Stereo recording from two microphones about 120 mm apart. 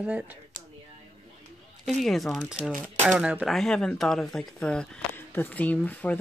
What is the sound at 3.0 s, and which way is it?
Speech, 10° right (ahead or behind).